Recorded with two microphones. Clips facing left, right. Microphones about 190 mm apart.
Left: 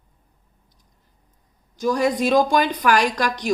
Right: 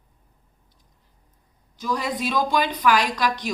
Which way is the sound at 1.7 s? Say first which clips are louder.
Left 7 dB; 45° left (ahead or behind).